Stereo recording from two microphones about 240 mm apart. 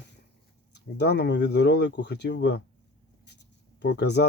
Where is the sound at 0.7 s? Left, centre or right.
Left.